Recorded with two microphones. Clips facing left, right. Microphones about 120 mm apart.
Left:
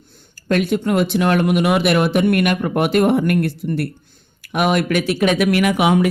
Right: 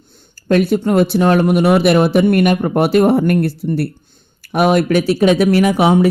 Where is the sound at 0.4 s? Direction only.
40° right (ahead or behind).